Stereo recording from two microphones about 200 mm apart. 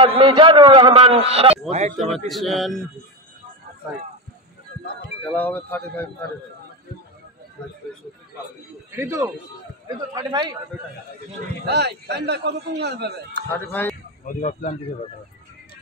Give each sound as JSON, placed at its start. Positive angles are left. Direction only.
{"t": 0.0, "sound": "a man's voice", "side_deg": -25}
{"t": 2.0, "sound": "speech", "side_deg": 0}
{"t": 5.3, "sound": "speech", "side_deg": 10}
{"t": 8.9, "sound": "a man's voice", "side_deg": -10}
{"t": 11.6, "sound": "a man's voice", "side_deg": -55}
{"t": 13.5, "sound": "speech", "side_deg": 10}
{"t": 14.2, "sound": "speech", "side_deg": 40}